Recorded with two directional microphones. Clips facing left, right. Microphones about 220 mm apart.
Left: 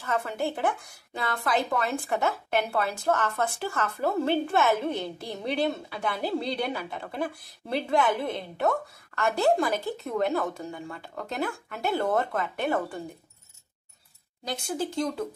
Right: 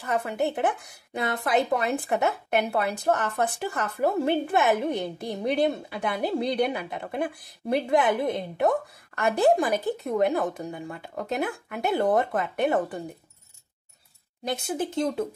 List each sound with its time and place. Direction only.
0.0 s a woman's voice: 15° right (ahead or behind)
14.7 s speech: 20° right (ahead or behind)